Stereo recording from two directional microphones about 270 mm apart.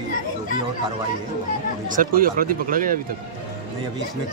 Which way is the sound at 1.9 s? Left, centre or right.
Right.